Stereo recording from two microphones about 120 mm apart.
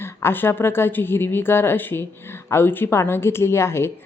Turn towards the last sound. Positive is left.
turn(degrees=20)  # may be behind; listen again after turning